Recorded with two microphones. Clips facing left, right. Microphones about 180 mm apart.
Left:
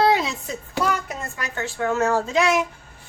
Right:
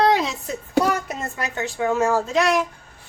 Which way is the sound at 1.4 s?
15° right (ahead or behind).